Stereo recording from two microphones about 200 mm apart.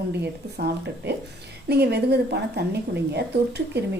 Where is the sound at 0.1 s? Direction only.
55° right (ahead or behind).